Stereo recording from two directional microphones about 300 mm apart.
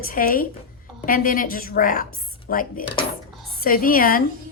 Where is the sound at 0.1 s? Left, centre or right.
Left.